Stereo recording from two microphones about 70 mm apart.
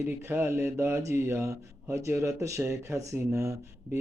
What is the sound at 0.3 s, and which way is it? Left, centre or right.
Speech, right.